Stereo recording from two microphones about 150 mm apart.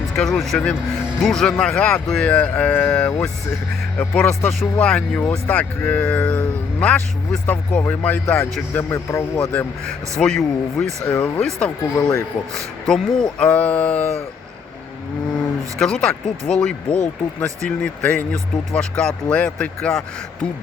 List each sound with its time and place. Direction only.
0.2 s speech: centre (ahead or behind)
11.9 s speech: 25° left (ahead or behind)
12.9 s speech: 5° left (ahead or behind)
15.8 s speech: 5° left (ahead or behind)